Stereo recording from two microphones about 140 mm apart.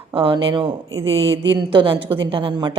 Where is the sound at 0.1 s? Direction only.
40° right (ahead or behind).